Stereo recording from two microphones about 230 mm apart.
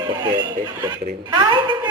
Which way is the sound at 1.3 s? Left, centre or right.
Right.